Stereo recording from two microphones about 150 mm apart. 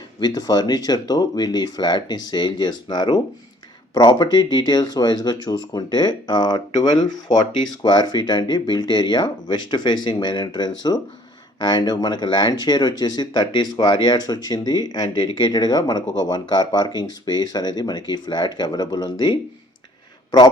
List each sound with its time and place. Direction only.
0.2 s speech: 25° left (ahead or behind)